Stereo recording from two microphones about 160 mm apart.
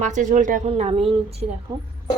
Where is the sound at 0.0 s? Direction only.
50° right (ahead or behind).